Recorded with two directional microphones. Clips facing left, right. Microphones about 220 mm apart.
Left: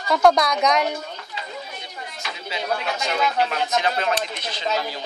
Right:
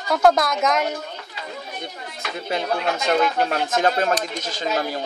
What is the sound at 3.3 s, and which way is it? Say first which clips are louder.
Speech: right 1 dB; 45° right (ahead or behind).